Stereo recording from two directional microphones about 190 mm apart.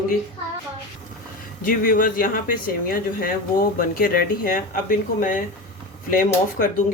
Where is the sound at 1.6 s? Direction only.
45° left (ahead or behind).